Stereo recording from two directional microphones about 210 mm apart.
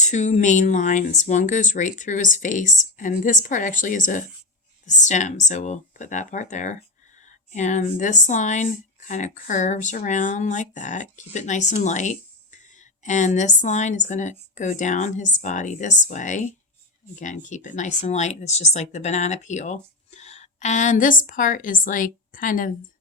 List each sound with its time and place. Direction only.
0.0 s speech: 35° left (ahead or behind)